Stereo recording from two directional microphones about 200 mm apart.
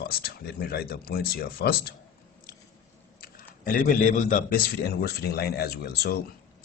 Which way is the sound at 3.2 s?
45° left (ahead or behind).